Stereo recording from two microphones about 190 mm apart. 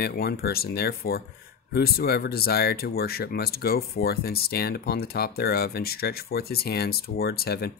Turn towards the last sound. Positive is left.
turn(degrees=55)  # may be behind; listen again after turning